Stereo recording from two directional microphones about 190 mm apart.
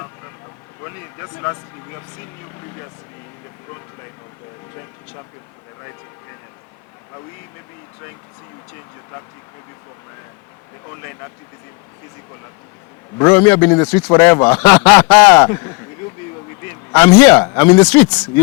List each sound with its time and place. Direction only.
0.9 s a man's voice: 15° left (ahead or behind)
13.1 s a man's voice: 15° left (ahead or behind)